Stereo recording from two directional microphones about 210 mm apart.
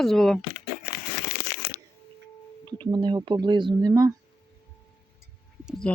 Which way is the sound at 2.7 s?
20° right (ahead or behind).